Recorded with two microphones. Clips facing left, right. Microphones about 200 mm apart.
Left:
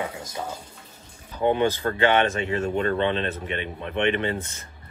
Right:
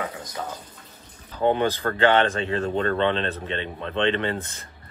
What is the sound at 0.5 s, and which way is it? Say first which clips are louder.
Speech: even; 10° left (ahead or behind).